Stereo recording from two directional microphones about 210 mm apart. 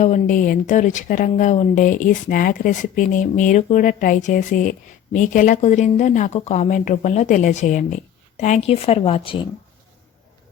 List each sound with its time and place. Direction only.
0.0 s a woman's voice: 35° left (ahead or behind)